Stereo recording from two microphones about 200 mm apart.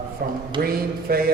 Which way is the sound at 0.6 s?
50° right (ahead or behind).